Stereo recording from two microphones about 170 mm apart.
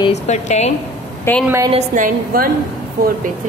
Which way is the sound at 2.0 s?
55° right (ahead or behind).